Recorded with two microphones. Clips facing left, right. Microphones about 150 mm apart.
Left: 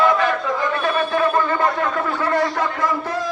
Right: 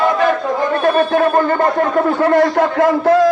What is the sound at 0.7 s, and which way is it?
A man's voice, 45° right (ahead or behind).